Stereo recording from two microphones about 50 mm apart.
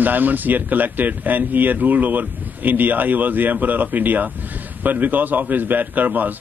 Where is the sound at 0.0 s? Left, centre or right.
Right.